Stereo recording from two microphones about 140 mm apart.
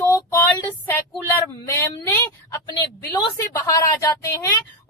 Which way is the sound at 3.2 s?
30° left (ahead or behind).